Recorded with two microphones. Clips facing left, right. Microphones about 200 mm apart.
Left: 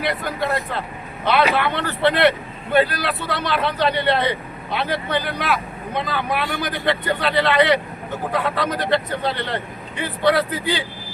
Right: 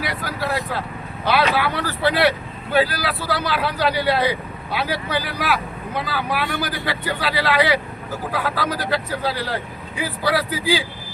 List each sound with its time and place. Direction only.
0.0 s speech: 5° right (ahead or behind)